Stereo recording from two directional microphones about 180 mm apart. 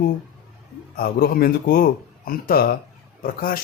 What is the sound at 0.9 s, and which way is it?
Speech, 55° left (ahead or behind).